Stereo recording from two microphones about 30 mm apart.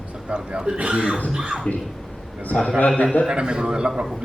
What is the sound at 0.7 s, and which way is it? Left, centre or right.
Speech, right.